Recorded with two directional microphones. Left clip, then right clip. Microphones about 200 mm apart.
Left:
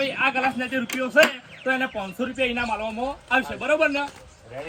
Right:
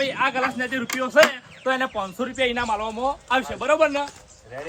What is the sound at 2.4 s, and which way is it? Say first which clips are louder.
Speech: right 2 dB; 50° right (ahead or behind).